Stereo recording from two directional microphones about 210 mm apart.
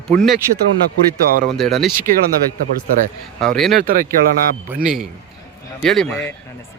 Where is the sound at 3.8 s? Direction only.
40° right (ahead or behind).